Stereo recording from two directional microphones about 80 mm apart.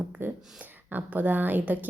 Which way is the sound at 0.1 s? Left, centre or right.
Right.